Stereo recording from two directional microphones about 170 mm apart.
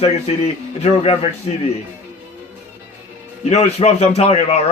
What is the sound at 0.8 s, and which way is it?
Speech, 35° left (ahead or behind).